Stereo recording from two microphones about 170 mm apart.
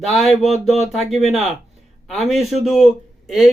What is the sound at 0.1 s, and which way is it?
Speech, centre (ahead or behind).